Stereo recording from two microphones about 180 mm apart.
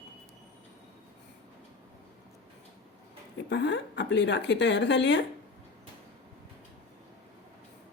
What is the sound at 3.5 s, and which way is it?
A woman's voice, 75° left (ahead or behind).